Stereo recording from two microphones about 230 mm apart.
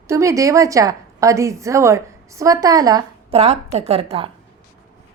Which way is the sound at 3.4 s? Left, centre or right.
Right.